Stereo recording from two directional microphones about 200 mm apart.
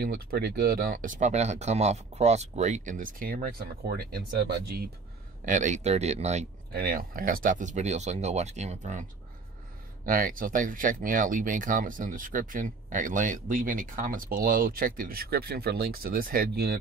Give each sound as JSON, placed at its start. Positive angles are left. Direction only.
{"t": 0.0, "sound": "speech", "side_deg": -50}
{"t": 5.4, "sound": "speech", "side_deg": -40}
{"t": 6.7, "sound": "speech", "side_deg": -50}
{"t": 10.0, "sound": "speech", "side_deg": -45}